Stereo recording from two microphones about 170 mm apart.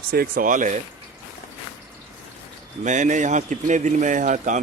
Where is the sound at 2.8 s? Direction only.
45° right (ahead or behind).